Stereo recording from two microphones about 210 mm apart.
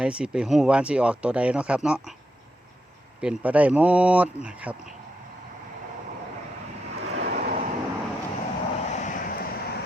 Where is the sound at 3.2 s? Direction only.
5° right (ahead or behind).